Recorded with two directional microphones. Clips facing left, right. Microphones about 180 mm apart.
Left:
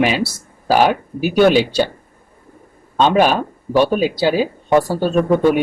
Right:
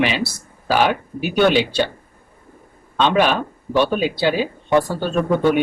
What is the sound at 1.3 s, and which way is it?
Speech, 40° left (ahead or behind).